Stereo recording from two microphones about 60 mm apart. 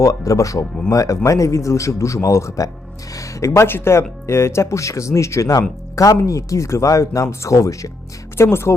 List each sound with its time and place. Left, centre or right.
0.0 s speech: left
8.4 s speech: left